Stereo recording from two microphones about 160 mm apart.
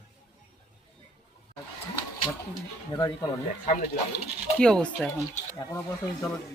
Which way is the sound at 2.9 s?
25° left (ahead or behind).